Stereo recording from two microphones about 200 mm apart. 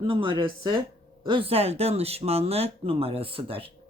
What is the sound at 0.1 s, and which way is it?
Speech, 25° right (ahead or behind).